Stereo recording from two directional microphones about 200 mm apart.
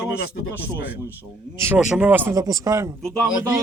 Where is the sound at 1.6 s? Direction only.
10° right (ahead or behind).